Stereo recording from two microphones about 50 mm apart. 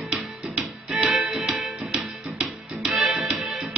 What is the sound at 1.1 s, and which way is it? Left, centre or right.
Music, centre.